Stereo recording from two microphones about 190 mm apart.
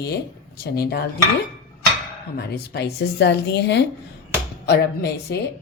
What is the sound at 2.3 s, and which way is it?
A woman's voice, 60° left (ahead or behind).